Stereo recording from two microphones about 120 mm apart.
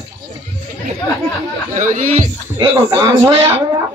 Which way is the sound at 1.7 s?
90° right.